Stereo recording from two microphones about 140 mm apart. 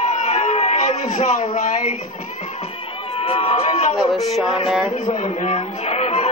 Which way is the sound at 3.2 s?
45° left (ahead or behind).